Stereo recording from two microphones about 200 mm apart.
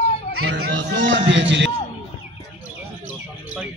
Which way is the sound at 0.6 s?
65° right (ahead or behind).